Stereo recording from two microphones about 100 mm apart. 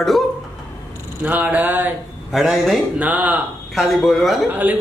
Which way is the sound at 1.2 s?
15° right (ahead or behind).